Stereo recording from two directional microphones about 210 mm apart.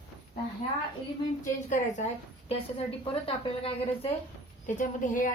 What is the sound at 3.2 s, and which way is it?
Speech, 25° left (ahead or behind).